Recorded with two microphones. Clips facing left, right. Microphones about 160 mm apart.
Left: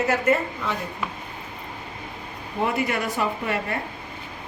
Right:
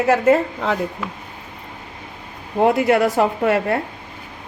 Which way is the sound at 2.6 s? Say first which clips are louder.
Right 10 dB; 90° right.